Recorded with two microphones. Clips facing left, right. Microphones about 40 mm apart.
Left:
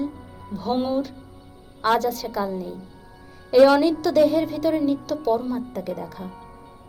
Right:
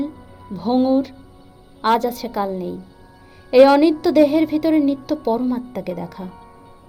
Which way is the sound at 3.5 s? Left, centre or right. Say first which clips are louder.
Right 4 dB; right.